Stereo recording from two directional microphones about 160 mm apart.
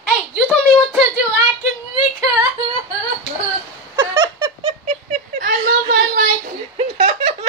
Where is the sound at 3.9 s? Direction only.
25° right (ahead or behind).